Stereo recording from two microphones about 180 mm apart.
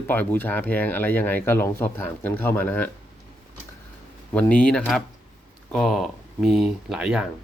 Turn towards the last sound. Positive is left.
turn(degrees=-5)  # may be behind; listen again after turning